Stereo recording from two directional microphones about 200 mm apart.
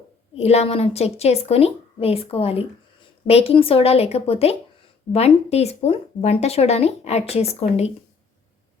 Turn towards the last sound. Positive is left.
turn(degrees=30)  # may be behind; listen again after turning